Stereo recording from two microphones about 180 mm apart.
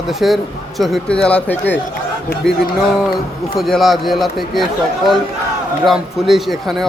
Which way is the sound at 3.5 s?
Centre (ahead or behind).